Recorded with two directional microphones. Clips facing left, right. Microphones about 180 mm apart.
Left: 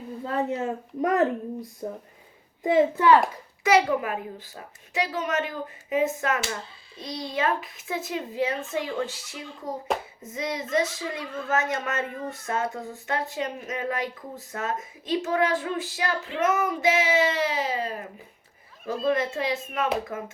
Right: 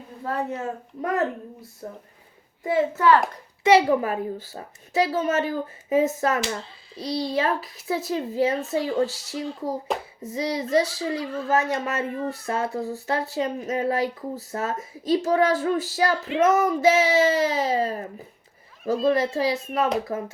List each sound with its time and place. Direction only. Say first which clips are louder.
0.3 s a woman's voice: left 1 dB; 20° left (ahead or behind)
3.6 s speech: right 4 dB; 30° right (ahead or behind)
19.0 s speech: right 3 dB; 35° right (ahead or behind)